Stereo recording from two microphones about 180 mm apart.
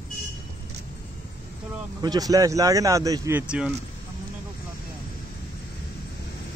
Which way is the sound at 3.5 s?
5° right (ahead or behind).